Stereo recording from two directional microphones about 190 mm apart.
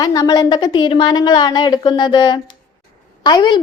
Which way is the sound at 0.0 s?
20° left (ahead or behind).